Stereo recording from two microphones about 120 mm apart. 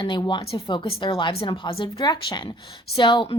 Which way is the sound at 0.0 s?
40° left (ahead or behind).